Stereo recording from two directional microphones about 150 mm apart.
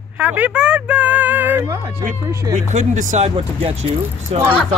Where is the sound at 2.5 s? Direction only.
55° right (ahead or behind).